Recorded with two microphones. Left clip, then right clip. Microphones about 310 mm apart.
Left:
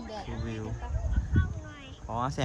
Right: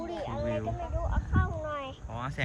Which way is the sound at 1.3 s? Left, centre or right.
Centre.